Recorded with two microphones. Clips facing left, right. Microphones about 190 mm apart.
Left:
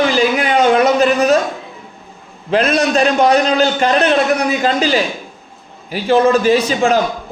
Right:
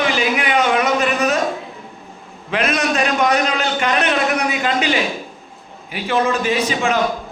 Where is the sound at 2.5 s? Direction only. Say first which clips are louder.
Left 5 dB; 35° left (ahead or behind).